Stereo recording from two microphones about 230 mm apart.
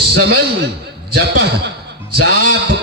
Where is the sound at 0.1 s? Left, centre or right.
Right.